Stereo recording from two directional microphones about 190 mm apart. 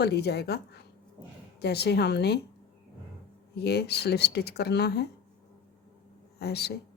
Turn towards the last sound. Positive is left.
turn(degrees=60)  # may be behind; listen again after turning